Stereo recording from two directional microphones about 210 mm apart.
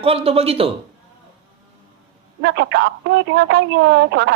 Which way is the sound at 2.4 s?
55° right (ahead or behind).